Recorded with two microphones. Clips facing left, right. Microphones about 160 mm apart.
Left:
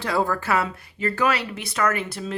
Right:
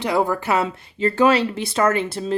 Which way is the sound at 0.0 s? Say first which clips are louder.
Right 3 dB; 20° right (ahead or behind).